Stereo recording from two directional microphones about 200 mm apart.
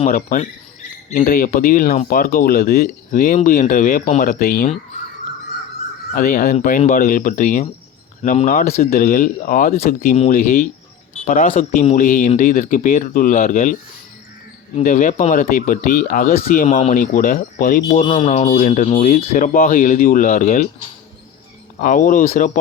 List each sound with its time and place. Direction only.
0.0 s speech: 40° left (ahead or behind)
6.1 s speech: 45° left (ahead or behind)
14.8 s speech: 40° left (ahead or behind)
18.0 s speech: 30° left (ahead or behind)
21.8 s speech: 40° left (ahead or behind)